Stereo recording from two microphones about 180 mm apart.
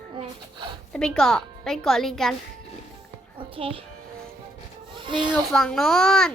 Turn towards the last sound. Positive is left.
turn(degrees=0)  # may be behind; listen again after turning